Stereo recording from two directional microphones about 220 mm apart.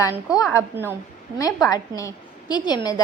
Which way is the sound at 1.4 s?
15° left (ahead or behind).